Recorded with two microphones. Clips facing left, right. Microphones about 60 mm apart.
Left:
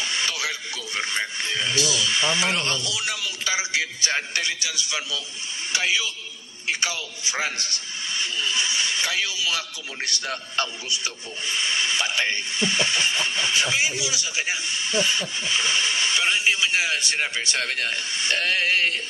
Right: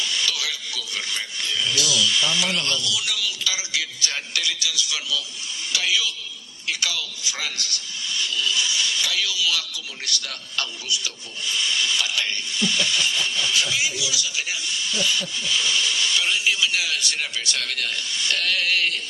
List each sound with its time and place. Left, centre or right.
0.0 s a man's voice: left